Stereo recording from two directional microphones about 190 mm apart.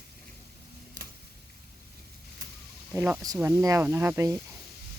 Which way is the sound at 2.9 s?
15° right (ahead or behind).